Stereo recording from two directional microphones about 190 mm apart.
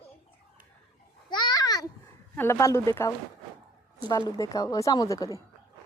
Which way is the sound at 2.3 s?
15° left (ahead or behind).